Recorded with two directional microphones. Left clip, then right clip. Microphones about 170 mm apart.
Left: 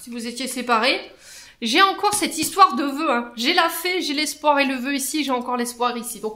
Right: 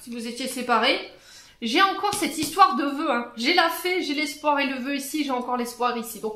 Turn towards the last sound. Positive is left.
turn(degrees=30)  # may be behind; listen again after turning